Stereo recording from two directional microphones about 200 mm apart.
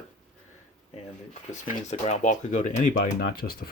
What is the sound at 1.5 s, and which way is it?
Speech, 40° left (ahead or behind).